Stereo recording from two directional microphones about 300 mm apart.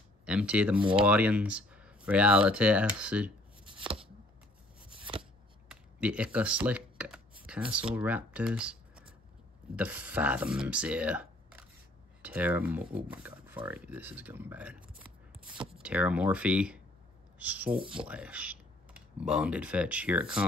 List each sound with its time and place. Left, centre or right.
0.2 s speech: centre
0.7 s speech: centre
1.0 s speech: centre
3.6 s chopping: centre
5.1 s shuffling cards: centre
5.7 s computer keyboard: centre
7.9 s speech: centre